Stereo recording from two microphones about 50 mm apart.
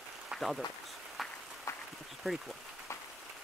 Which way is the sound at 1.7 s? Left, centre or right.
Left.